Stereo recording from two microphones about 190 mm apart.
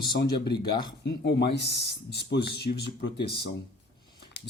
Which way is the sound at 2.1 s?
60° left (ahead or behind).